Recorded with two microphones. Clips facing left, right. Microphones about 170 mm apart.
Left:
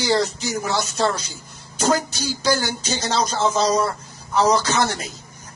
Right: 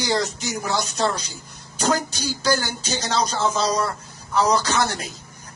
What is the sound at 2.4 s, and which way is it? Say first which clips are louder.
Speech: left 1 dB; 10° left (ahead or behind).